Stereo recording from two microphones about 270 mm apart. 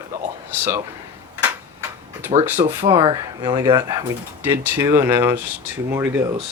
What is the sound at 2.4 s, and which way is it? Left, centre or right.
Speech, centre.